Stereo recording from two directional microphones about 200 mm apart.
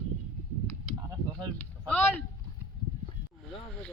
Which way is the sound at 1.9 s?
10° left (ahead or behind).